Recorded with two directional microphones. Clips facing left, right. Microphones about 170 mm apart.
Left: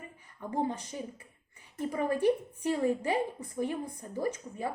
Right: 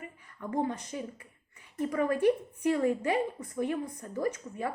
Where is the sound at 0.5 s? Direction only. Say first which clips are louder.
Right 1 dB; 30° left (ahead or behind).